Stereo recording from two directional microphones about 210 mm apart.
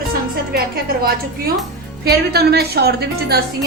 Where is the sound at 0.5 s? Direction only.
45° right (ahead or behind).